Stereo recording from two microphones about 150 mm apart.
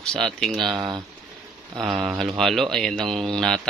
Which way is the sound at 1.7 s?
5° right (ahead or behind).